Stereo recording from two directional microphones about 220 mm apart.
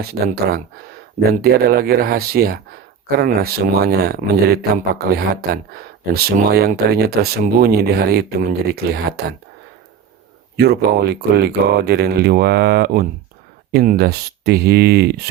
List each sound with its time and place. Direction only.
0.0 s speech: 45° right (ahead or behind)
10.6 s speech: 45° right (ahead or behind)